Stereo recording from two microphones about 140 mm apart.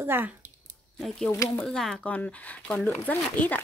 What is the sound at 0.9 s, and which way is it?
A woman's voice, centre (ahead or behind).